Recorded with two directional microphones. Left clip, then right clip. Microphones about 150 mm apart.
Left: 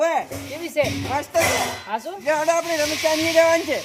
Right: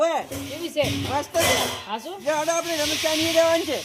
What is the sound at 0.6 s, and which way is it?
Speech, 15° right (ahead or behind).